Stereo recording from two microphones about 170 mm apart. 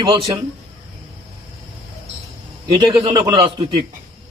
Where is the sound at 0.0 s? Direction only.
25° right (ahead or behind).